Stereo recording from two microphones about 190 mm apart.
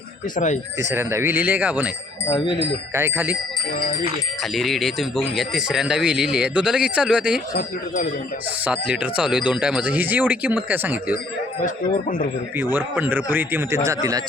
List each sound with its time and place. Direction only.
0.3 s speech: 40° left (ahead or behind)
0.8 s speech: 15° right (ahead or behind)
2.3 s speech: 25° left (ahead or behind)
2.9 s speech: 10° right (ahead or behind)
4.5 s speech: centre (ahead or behind)
8.6 s speech: 5° right (ahead or behind)
11.6 s speech: 45° left (ahead or behind)
12.7 s speech: 10° right (ahead or behind)